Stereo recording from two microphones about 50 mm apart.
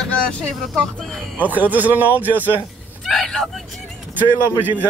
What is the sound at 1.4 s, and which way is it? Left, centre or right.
A man's voice, right.